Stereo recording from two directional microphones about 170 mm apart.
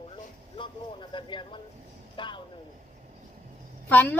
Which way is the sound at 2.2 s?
30° left (ahead or behind).